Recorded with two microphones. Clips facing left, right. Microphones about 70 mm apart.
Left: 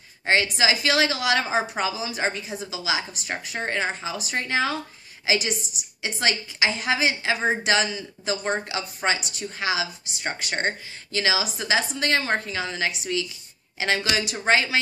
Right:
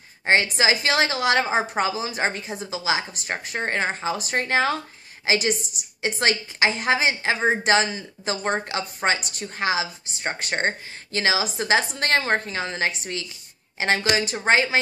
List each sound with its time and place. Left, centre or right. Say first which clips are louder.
0.2 s a woman's voice: right 2 dB; right